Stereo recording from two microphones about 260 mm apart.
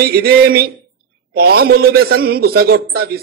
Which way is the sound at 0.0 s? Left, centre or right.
Right.